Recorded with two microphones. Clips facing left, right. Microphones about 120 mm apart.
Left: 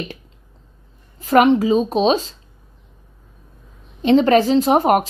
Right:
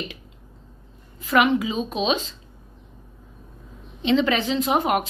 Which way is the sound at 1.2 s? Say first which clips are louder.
Left 6 dB; 40° left (ahead or behind).